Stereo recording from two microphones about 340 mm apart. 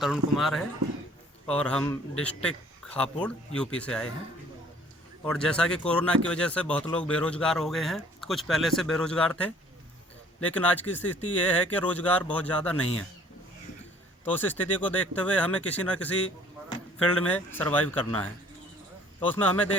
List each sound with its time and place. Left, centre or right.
0.0 s speech: centre
5.2 s speech: centre
12.7 s a man's voice: left
14.3 s speech: centre
17.2 s speech: centre